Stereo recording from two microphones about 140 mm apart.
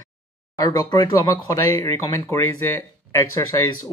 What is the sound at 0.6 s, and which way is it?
Speech, 25° left (ahead or behind).